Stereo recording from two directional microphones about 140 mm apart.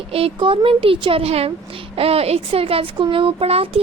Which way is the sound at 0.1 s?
40° right (ahead or behind).